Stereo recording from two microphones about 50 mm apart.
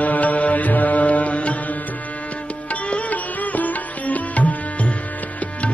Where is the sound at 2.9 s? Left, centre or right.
Left.